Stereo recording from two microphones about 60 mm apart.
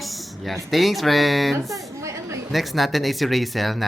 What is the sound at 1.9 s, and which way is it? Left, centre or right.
Chatter, right.